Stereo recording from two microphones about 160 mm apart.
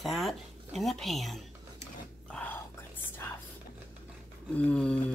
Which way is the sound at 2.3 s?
10° left (ahead or behind).